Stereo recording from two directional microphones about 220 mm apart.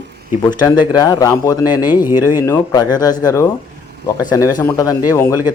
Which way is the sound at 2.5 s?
15° left (ahead or behind).